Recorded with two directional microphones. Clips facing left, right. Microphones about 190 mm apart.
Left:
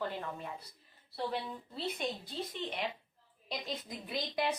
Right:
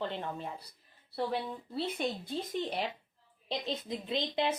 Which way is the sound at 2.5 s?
40° right (ahead or behind).